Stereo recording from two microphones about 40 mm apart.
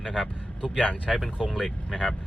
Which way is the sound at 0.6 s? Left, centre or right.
Right.